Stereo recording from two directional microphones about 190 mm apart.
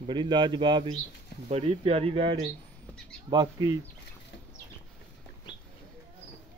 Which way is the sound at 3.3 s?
20° right (ahead or behind).